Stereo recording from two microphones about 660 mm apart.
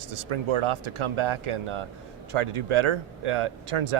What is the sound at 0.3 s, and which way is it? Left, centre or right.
Speech, right.